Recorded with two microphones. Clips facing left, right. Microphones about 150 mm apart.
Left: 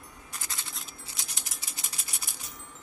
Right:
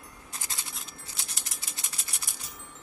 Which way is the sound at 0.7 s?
Centre (ahead or behind).